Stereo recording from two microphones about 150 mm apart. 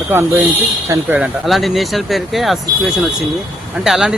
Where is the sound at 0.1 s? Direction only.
15° right (ahead or behind).